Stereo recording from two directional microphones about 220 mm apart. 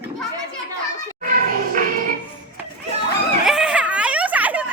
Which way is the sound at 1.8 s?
40° right (ahead or behind).